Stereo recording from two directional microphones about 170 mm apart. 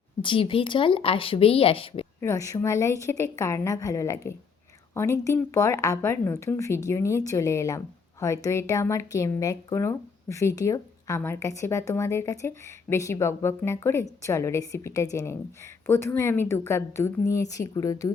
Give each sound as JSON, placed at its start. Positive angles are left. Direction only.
{"t": 0.2, "sound": "speech", "side_deg": 30}
{"t": 2.2, "sound": "speech", "side_deg": 20}